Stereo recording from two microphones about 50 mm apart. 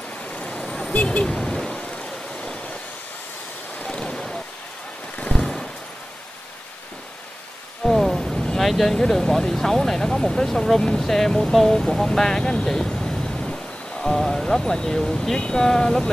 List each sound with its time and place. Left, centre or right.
0.2 s vehicle: left
0.9 s vehicle: left
1.2 s vehicle: centre
1.9 s a sound: left
3.7 s vehicle: left
5.3 s horse: centre
7.8 s thunder: centre
8.5 s vehicle: centre
8.9 s speech: centre